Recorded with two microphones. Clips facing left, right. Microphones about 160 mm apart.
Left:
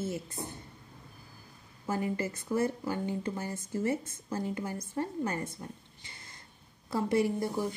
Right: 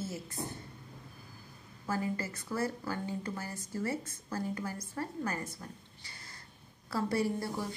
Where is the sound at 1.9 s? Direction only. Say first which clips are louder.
Left 3 dB; 20° left (ahead or behind).